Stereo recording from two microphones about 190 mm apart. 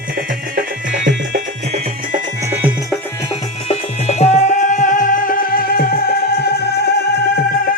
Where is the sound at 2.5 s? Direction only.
10° right (ahead or behind).